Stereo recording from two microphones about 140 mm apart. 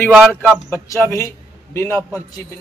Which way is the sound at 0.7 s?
20° left (ahead or behind).